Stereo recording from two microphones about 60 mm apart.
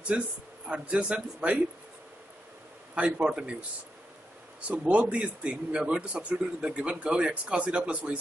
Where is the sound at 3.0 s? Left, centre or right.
Centre.